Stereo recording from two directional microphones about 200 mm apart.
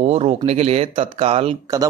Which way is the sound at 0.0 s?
35° right (ahead or behind).